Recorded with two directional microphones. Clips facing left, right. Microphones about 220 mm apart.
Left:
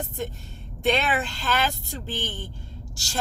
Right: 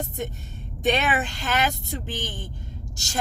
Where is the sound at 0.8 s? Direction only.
20° right (ahead or behind).